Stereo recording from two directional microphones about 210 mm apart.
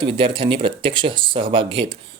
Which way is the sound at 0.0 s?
25° right (ahead or behind).